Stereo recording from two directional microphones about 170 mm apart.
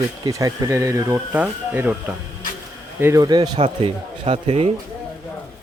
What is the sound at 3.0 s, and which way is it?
Speech, 20° right (ahead or behind).